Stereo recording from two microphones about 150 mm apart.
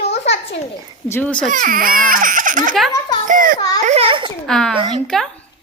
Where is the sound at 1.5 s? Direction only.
65° right (ahead or behind).